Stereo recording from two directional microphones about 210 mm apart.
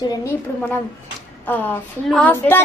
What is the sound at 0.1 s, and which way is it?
A woman's voice, 15° left (ahead or behind).